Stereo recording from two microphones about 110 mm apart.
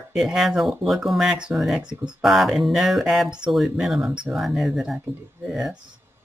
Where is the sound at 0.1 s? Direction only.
5° right (ahead or behind).